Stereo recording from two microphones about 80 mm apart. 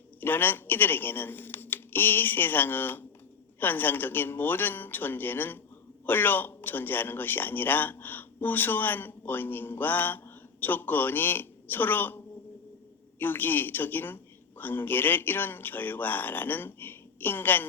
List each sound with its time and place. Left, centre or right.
0.2 s a man's voice: left